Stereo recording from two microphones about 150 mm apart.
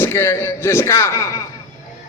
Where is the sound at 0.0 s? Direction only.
15° left (ahead or behind).